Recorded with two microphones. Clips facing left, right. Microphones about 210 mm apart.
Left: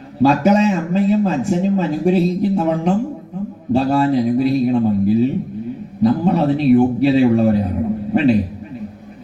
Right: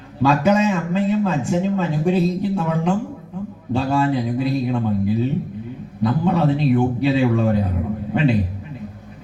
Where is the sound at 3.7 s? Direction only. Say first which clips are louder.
Left 4 dB; 35° left (ahead or behind).